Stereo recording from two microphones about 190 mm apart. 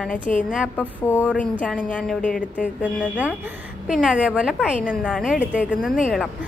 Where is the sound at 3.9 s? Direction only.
5° right (ahead or behind).